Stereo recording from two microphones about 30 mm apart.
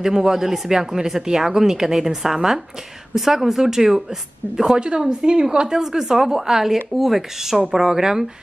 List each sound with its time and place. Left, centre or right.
0.0 s speech: centre
4.7 s a woman's voice: right
5.7 s speech: centre